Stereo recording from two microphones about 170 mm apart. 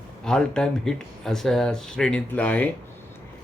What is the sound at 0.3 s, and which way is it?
Mantra, 5° left (ahead or behind).